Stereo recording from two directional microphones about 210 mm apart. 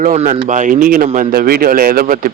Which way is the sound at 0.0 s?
35° right (ahead or behind).